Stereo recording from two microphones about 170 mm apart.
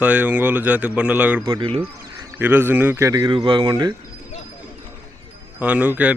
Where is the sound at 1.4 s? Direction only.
25° right (ahead or behind).